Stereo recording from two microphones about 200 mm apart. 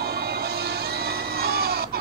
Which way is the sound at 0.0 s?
55° right (ahead or behind).